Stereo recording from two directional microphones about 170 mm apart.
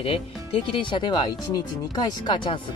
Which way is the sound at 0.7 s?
30° left (ahead or behind).